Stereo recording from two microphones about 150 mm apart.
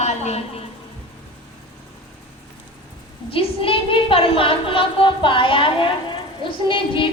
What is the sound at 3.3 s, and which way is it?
A woman's voice, 40° left (ahead or behind).